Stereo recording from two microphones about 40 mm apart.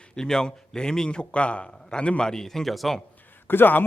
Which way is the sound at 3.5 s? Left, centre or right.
Left.